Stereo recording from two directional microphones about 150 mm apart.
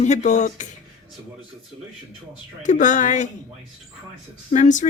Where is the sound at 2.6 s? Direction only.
55° left (ahead or behind).